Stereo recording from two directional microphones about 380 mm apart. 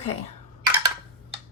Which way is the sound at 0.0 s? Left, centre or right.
Centre.